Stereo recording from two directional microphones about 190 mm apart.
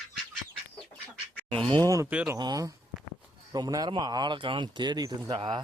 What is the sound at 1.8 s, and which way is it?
Speech, 15° right (ahead or behind).